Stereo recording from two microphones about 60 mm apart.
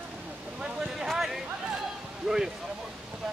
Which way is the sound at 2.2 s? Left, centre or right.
Centre.